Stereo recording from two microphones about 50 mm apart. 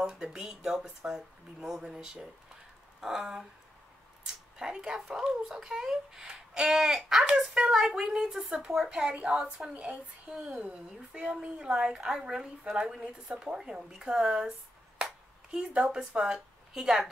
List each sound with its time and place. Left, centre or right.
0.1 s speech: centre
4.6 s speech: centre
9.8 s speech: right
15.0 s ping: centre
15.6 s speech: right